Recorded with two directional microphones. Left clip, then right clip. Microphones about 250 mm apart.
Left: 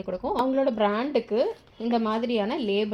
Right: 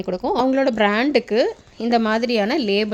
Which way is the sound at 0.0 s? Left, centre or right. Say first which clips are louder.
Right 6 dB; right.